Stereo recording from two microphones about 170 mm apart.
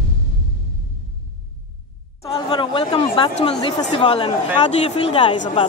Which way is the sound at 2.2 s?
30° left (ahead or behind).